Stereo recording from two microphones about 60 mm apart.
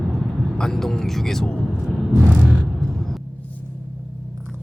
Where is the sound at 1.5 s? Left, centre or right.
Left.